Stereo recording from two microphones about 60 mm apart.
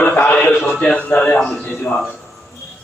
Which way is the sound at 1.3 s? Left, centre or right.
Centre.